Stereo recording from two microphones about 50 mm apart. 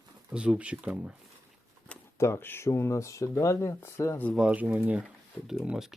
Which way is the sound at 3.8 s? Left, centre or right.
Left.